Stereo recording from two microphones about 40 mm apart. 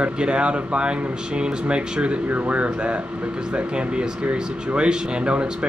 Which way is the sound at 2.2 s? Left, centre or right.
Right.